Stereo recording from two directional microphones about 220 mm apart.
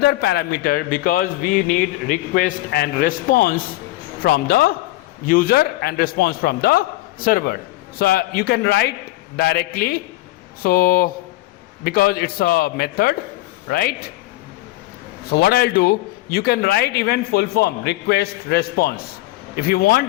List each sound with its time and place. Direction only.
0.0 s a man's voice: 45° left (ahead or behind)
15.3 s a man's voice: 45° left (ahead or behind)